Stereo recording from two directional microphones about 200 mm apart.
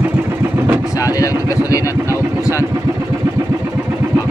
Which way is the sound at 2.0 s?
15° right (ahead or behind).